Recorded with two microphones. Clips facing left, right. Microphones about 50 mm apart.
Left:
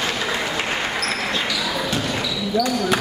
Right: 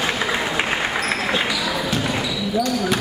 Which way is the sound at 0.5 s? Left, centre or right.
Centre.